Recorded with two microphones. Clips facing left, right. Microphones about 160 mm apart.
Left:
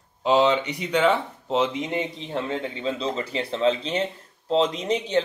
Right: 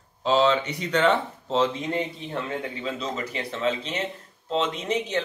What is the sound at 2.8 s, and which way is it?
Speech, 30° left (ahead or behind).